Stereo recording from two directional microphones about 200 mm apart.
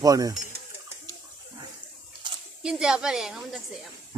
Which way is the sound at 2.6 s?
5° right (ahead or behind).